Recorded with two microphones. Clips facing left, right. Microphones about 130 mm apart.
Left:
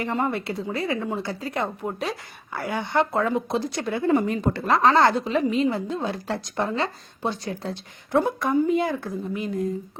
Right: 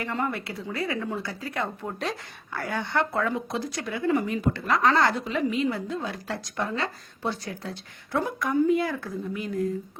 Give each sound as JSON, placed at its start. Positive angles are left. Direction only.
{"t": 0.0, "sound": "speech", "side_deg": 25}